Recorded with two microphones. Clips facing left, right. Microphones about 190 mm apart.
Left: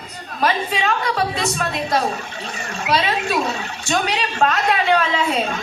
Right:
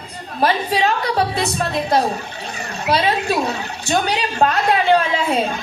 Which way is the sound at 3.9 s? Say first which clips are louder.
Right 2 dB; 35° right (ahead or behind).